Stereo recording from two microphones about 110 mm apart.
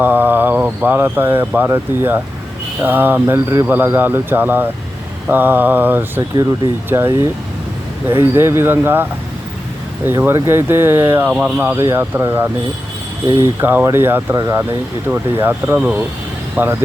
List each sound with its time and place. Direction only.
0.0 s speech: 15° right (ahead or behind)
5.3 s mantra: 20° right (ahead or behind)
6.9 s speech: 25° right (ahead or behind)
10.1 s speech: 25° right (ahead or behind)
16.6 s mantra: 20° right (ahead or behind)